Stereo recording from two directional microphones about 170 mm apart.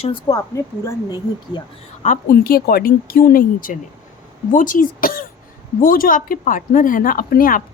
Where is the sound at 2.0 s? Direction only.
50° left (ahead or behind).